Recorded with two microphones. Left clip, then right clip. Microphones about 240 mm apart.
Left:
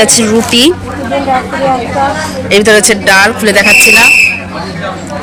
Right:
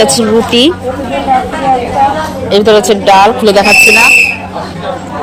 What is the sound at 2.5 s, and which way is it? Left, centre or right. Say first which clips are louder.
Speech: left 1 dB; left.